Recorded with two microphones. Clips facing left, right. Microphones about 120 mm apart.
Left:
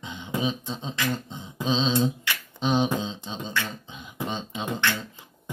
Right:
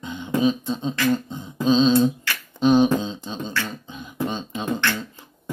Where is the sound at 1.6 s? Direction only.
20° left (ahead or behind).